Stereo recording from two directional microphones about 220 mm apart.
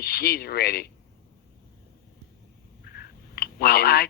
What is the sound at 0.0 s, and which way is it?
Speech, 45° left (ahead or behind).